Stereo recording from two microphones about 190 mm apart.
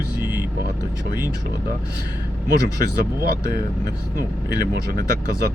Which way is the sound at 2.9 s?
50° right (ahead or behind).